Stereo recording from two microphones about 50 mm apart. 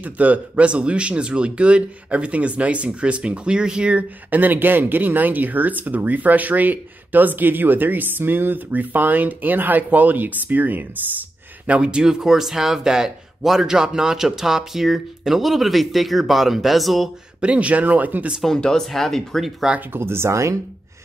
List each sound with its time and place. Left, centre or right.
0.0 s speech: right
4.3 s speech: right; by 17.1 s centre
17.4 s speech: right
18.6 s speech: centre
19.9 s speech: right